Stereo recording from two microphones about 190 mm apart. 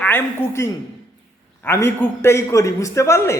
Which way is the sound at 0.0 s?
10° left (ahead or behind).